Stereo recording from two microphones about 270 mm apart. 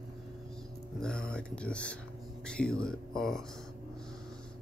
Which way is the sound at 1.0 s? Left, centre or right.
Centre.